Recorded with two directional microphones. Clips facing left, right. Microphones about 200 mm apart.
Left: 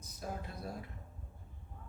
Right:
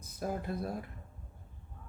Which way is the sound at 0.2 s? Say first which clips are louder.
Right 7 dB; 55° right (ahead or behind).